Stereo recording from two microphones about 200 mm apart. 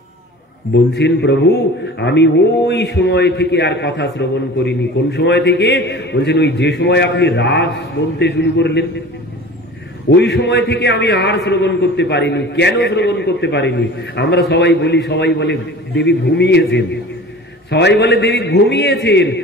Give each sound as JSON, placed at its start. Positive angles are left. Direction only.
{"t": 0.9, "sound": "a man's voice", "side_deg": 60}
{"t": 10.0, "sound": "a man's voice", "side_deg": 60}